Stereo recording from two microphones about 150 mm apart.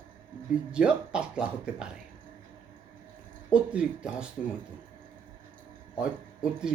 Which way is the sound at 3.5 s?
5° right (ahead or behind).